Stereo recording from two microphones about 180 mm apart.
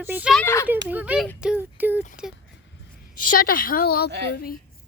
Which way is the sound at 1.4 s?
10° right (ahead or behind).